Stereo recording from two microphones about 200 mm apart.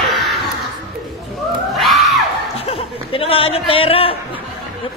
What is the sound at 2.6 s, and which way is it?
Speech, 30° left (ahead or behind).